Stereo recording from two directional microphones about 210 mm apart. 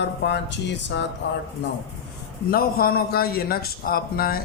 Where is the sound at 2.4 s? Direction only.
45° left (ahead or behind).